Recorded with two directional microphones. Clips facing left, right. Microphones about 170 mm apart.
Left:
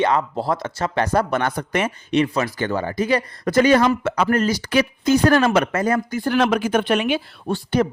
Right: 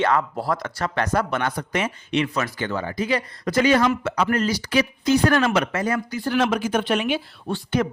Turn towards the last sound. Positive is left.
turn(degrees=40)  # may be behind; listen again after turning